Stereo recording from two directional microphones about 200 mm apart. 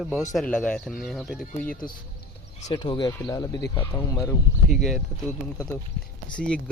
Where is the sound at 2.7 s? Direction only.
25° left (ahead or behind).